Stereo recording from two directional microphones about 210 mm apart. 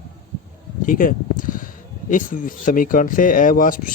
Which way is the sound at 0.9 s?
40° left (ahead or behind).